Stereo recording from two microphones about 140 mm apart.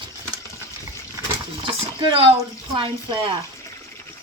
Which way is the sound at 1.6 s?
40° right (ahead or behind).